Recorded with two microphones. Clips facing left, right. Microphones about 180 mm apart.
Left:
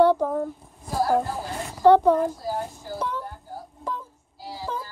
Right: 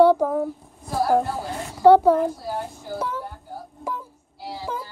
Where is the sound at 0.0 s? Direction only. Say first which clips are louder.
Right 3 dB; 10° right (ahead or behind).